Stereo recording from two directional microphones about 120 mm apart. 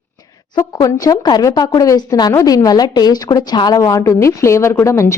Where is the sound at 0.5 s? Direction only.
25° left (ahead or behind).